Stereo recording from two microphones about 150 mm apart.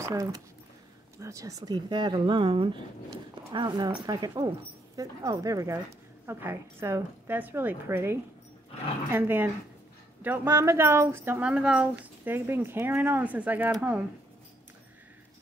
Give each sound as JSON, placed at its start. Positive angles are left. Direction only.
{"t": 0.0, "sound": "speech", "side_deg": -20}